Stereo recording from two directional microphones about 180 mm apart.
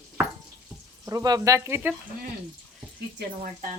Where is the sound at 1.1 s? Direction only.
20° right (ahead or behind).